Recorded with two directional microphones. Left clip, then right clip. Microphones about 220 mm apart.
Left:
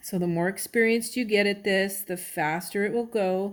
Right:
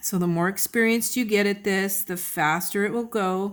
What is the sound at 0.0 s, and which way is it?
Speech, 40° right (ahead or behind).